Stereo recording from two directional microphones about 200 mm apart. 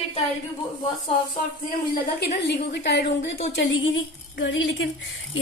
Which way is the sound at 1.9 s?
50° left (ahead or behind).